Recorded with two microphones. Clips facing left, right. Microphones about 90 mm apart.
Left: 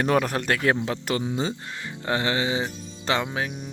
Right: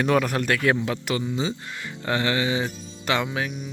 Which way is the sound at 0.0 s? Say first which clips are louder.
Right 1 dB; 35° left (ahead or behind).